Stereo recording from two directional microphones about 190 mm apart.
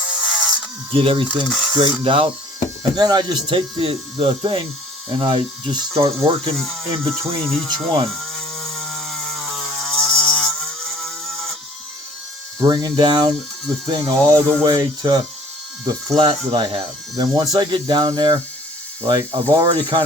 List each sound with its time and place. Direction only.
0.0 s a sound: 5° right (ahead or behind)
0.9 s speech: 30° right (ahead or behind)
1.5 s cutlery: centre (ahead or behind)
1.7 s speech: 25° right (ahead or behind)
7.0 s speech: centre (ahead or behind)
8.2 s a sound: centre (ahead or behind)
12.5 s speech: 20° right (ahead or behind)